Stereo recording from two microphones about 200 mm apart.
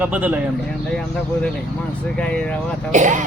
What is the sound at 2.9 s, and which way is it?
Speech, 40° right (ahead or behind).